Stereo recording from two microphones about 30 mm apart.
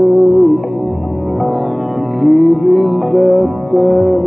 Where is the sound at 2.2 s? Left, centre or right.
Centre.